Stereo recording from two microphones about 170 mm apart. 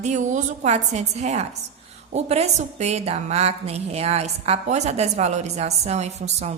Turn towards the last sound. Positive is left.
turn(degrees=-40)  # may be behind; listen again after turning